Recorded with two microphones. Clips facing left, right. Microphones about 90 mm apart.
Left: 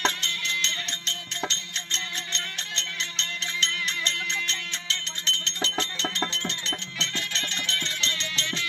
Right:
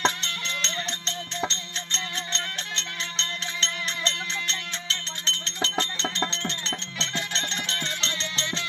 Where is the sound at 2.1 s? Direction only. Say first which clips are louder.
Right 3 dB; 35° right (ahead or behind).